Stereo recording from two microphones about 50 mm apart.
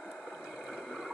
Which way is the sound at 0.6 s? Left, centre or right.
Centre.